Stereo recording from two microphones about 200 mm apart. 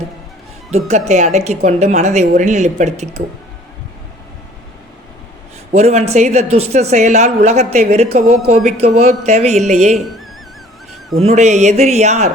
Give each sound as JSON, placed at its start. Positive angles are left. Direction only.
{"t": 0.9, "sound": "a woman's voice", "side_deg": -35}
{"t": 5.7, "sound": "a woman's voice", "side_deg": -35}
{"t": 9.9, "sound": "speech", "side_deg": 0}
{"t": 11.2, "sound": "a woman's voice", "side_deg": -35}